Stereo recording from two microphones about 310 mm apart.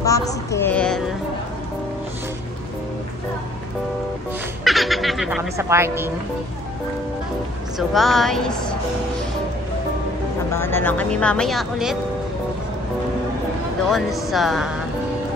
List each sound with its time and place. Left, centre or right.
0.0 s a sound: centre
4.6 s speech: centre
7.9 s speech: centre
10.5 s speech: centre
13.8 s speech: centre